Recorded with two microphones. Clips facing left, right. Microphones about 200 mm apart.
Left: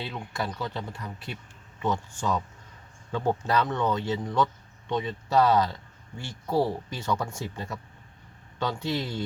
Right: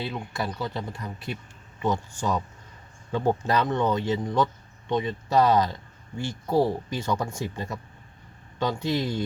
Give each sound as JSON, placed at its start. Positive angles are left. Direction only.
{"t": 0.0, "sound": "speech", "side_deg": -10}